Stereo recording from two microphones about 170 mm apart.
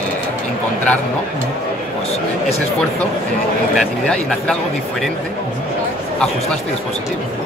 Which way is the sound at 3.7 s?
5° left (ahead or behind).